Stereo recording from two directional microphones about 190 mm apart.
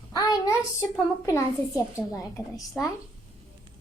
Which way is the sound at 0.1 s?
20° left (ahead or behind).